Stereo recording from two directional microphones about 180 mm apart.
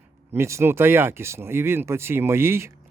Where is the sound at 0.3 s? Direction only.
15° right (ahead or behind).